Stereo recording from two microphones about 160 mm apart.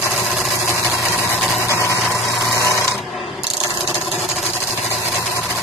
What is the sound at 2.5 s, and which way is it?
Filing, 20° left (ahead or behind).